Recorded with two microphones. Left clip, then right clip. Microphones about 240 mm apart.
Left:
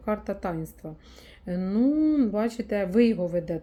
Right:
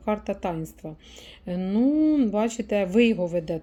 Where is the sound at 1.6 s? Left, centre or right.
Right.